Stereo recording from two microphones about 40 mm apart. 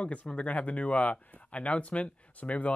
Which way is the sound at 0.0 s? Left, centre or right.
Left.